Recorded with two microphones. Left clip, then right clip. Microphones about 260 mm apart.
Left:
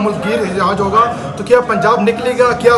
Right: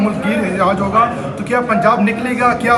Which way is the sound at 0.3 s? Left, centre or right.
Left.